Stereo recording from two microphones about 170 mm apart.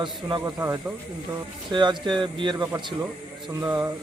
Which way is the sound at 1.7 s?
25° right (ahead or behind).